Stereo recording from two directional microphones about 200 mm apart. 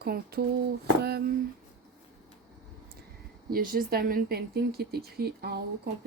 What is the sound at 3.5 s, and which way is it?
Speech, 45° right (ahead or behind).